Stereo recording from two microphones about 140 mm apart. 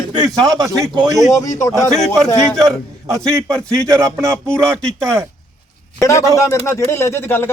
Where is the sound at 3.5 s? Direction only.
5° left (ahead or behind).